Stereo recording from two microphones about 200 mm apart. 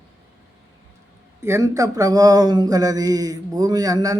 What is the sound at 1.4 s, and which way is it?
Speech, 15° right (ahead or behind).